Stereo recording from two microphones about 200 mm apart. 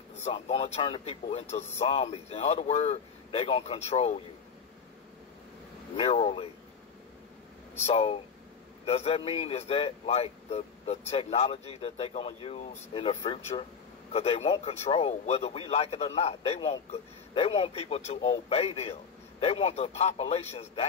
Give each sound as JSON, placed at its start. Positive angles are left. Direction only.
{"t": 0.2, "sound": "a man's voice", "side_deg": 30}
{"t": 5.9, "sound": "a man's voice", "side_deg": 30}
{"t": 7.7, "sound": "a man's voice", "side_deg": 30}